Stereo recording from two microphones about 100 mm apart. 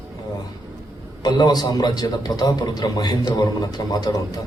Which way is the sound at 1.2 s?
45° left (ahead or behind).